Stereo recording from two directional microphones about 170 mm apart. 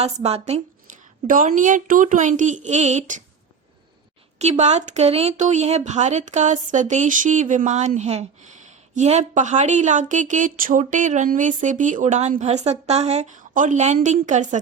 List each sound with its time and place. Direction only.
0.0 s speech: 35° right (ahead or behind)
4.4 s speech: 40° right (ahead or behind)